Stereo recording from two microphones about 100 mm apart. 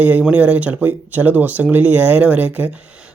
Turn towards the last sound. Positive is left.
turn(degrees=-10)  # may be behind; listen again after turning